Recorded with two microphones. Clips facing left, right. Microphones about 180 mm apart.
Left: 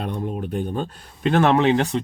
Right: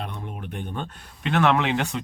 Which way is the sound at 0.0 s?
35° left (ahead or behind).